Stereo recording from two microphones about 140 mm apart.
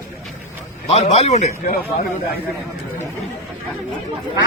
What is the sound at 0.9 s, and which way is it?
Speech, 50° left (ahead or behind).